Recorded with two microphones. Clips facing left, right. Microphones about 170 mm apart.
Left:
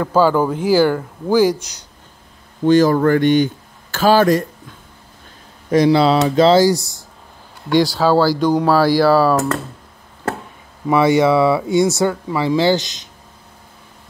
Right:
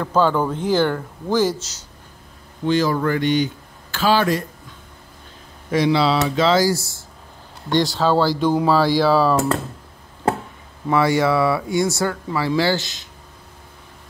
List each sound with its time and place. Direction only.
0.0 s speech: 5° left (ahead or behind)
2.6 s speech: 45° left (ahead or behind)
5.7 s speech: 40° left (ahead or behind)
6.6 s speech: 20° left (ahead or behind)
7.7 s speech: 5° left (ahead or behind)
10.9 s speech: 20° left (ahead or behind)